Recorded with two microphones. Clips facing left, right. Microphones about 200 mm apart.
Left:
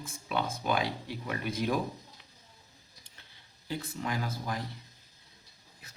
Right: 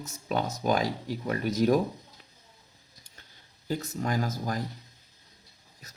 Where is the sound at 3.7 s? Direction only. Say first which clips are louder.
Right 5 dB; 45° right (ahead or behind).